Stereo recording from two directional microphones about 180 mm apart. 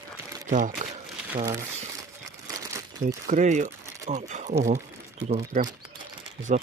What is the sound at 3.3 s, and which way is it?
Speech, 40° right (ahead or behind).